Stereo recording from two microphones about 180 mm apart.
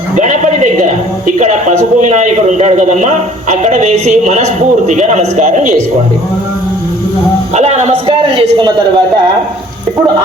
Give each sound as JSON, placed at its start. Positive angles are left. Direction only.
{"t": 0.2, "sound": "a sound", "side_deg": -45}
{"t": 1.4, "sound": "a man's voice", "side_deg": -40}
{"t": 7.5, "sound": "a man's voice", "side_deg": -40}
{"t": 8.0, "sound": "a man's voice", "side_deg": -25}